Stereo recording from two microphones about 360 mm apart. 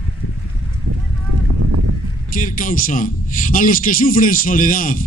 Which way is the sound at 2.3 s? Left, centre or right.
Left.